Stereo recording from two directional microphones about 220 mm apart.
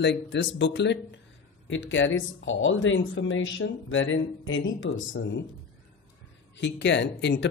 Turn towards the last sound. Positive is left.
turn(degrees=55)  # may be behind; listen again after turning